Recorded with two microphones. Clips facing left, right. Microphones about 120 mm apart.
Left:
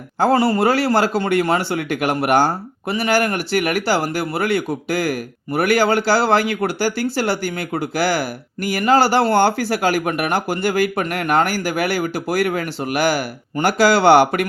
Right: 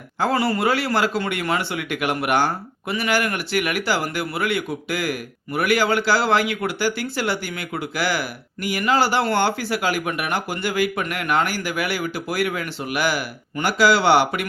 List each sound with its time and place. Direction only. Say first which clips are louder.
0.2 s speech: left 5 dB; 35° left (ahead or behind)